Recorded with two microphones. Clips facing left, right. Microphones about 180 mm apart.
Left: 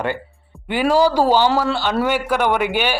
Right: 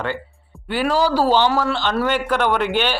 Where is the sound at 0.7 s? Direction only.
15° left (ahead or behind).